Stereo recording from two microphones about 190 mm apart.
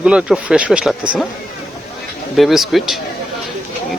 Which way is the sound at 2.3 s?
Centre (ahead or behind).